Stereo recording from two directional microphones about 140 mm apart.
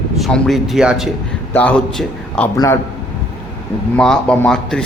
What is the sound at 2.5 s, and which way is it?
Speech, 20° left (ahead or behind).